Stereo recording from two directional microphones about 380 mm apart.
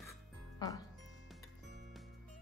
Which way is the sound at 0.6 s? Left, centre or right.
Centre.